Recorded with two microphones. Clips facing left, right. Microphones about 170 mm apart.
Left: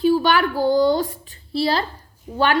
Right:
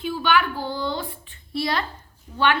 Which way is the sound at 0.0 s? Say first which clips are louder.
Left 6 dB; 40° left (ahead or behind).